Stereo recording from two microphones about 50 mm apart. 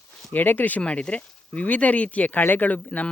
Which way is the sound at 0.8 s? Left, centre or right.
Left.